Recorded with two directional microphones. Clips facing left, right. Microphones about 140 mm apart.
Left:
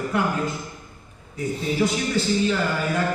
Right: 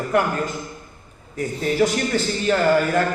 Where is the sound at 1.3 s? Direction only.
55° right (ahead or behind).